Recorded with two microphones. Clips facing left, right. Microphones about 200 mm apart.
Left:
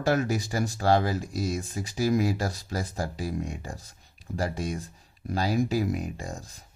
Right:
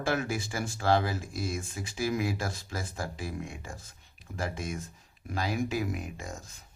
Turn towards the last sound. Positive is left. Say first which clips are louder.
# left 4 dB
turn(degrees=35)  # may be behind; listen again after turning